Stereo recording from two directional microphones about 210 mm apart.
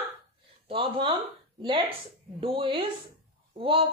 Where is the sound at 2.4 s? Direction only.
25° right (ahead or behind).